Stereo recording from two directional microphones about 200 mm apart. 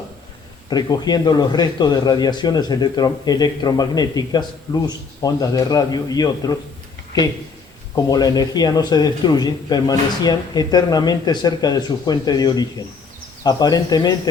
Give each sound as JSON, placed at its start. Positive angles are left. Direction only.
{"t": 0.7, "sound": "speech", "side_deg": 20}
{"t": 7.9, "sound": "speech", "side_deg": 20}